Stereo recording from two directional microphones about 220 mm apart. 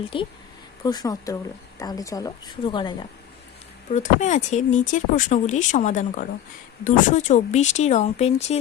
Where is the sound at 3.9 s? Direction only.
35° left (ahead or behind).